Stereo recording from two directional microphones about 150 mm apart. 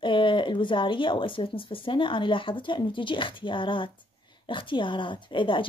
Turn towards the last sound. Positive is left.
turn(degrees=35)  # may be behind; listen again after turning